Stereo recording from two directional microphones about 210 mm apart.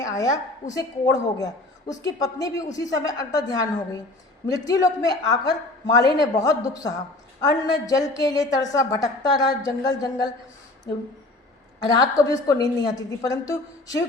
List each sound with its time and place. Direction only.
0.0 s a woman's voice: 15° left (ahead or behind)
10.9 s speech: 50° left (ahead or behind)
11.9 s a woman's voice: 15° left (ahead or behind)